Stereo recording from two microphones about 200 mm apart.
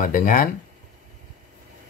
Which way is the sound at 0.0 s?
45° left (ahead or behind).